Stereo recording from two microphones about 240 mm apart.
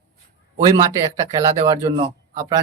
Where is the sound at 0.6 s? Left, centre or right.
Centre.